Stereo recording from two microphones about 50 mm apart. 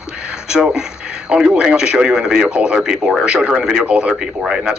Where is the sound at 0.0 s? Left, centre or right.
Centre.